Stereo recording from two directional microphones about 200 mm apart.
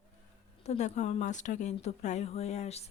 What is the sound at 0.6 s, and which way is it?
Speech, 35° left (ahead or behind).